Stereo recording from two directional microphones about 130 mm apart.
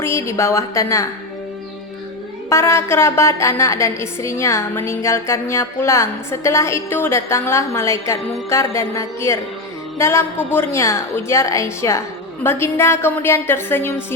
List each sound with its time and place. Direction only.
0.0 s a woman's voice: 20° left (ahead or behind)
2.5 s a woman's voice: 20° left (ahead or behind)